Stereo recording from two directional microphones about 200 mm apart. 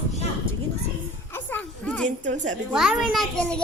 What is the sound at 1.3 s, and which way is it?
Children playing, 10° left (ahead or behind).